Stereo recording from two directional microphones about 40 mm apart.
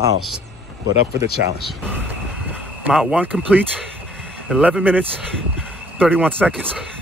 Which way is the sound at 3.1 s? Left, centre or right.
Right.